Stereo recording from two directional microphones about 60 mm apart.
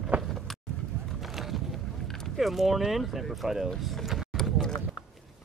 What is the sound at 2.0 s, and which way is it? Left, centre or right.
Boat, centre.